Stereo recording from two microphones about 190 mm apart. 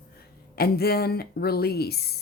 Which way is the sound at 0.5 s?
55° left (ahead or behind).